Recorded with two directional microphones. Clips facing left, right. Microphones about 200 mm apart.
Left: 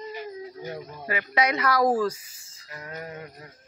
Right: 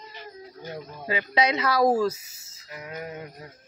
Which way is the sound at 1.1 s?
20° right (ahead or behind).